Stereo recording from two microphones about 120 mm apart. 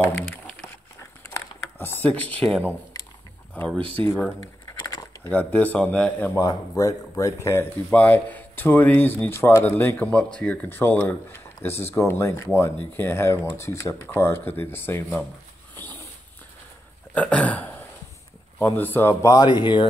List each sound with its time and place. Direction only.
0.1 s a sound: 10° left (ahead or behind)
1.3 s typing: 20° left (ahead or behind)
3.9 s speech: 15° left (ahead or behind)
4.8 s a sound: 30° left (ahead or behind)
5.3 s speech: 15° left (ahead or behind)
6.4 s speech: 30° left (ahead or behind)
7.9 s speech: 15° left (ahead or behind)
17.1 s a sound: 10° left (ahead or behind)
18.6 s speech: 20° left (ahead or behind)
19.3 s speech: 35° left (ahead or behind)